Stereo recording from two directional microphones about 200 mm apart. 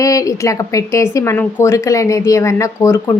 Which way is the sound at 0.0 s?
15° left (ahead or behind).